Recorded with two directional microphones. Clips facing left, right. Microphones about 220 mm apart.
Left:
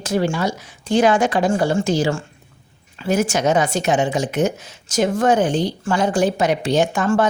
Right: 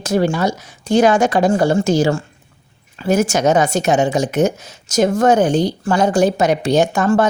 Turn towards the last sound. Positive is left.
turn(degrees=-40)  # may be behind; listen again after turning